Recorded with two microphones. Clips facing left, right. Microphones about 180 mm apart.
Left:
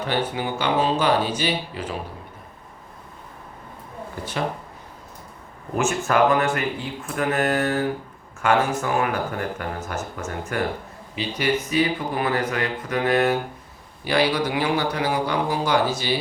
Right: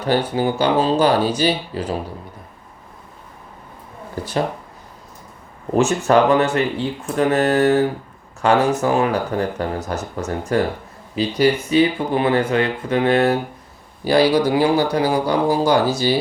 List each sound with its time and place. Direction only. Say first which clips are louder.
0.0 s speech: right 6 dB; 35° right (ahead or behind)
5.7 s speech: right 6 dB; 30° right (ahead or behind)